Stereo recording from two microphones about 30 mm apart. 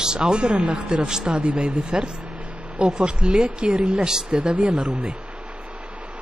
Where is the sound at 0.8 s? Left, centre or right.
Right.